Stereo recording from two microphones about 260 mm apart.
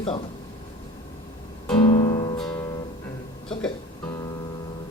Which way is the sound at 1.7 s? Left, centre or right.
Left.